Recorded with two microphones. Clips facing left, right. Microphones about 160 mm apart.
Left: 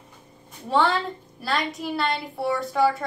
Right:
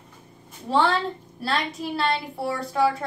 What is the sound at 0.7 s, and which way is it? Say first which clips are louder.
A woman's voice: even; centre (ahead or behind).